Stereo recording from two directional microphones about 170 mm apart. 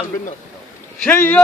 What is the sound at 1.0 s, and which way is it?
Speech, 10° left (ahead or behind).